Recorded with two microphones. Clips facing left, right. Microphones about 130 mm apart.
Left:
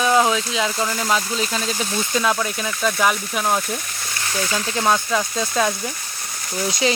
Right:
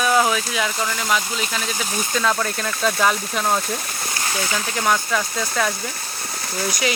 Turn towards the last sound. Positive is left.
turn(degrees=25)  # may be behind; listen again after turning